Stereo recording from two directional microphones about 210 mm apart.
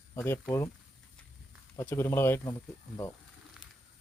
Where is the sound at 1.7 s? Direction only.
10° left (ahead or behind).